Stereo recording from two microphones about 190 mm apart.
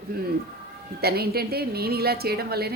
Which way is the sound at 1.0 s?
55° right (ahead or behind).